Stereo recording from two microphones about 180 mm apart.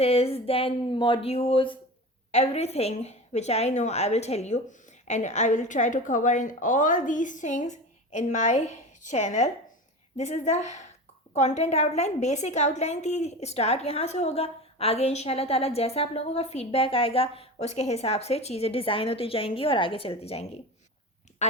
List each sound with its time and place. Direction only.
0.0 s a woman's voice: 35° left (ahead or behind)